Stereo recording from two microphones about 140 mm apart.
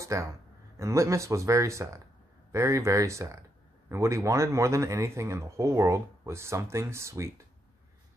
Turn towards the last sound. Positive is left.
turn(degrees=-20)  # may be behind; listen again after turning